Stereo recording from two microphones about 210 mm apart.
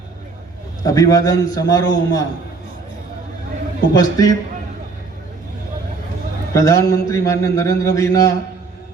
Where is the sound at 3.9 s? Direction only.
15° left (ahead or behind).